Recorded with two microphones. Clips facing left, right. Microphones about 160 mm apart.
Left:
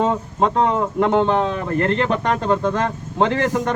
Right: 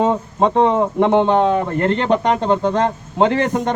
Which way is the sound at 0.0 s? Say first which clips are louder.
Right 2 dB; 20° right (ahead or behind).